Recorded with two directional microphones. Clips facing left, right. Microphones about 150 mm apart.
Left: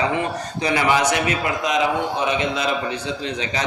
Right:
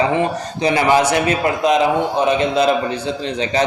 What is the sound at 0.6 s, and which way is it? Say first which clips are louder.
A man's voice: right 4 dB; 30° right (ahead or behind).